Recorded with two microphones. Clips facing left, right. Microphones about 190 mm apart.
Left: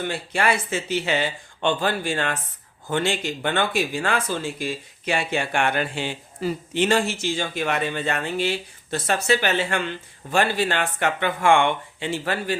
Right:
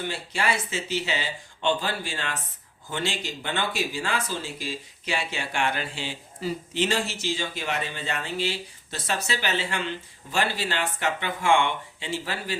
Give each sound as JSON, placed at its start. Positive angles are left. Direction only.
{"t": 0.1, "sound": "speech", "side_deg": 55}